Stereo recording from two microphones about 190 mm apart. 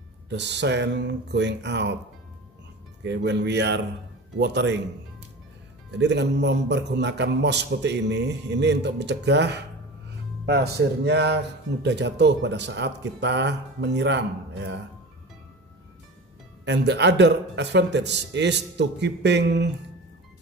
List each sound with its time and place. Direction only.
0.3 s a man's voice: 65° right (ahead or behind)
3.0 s a man's voice: 65° right (ahead or behind)
5.9 s a man's voice: 65° right (ahead or behind)
16.6 s a man's voice: 65° right (ahead or behind)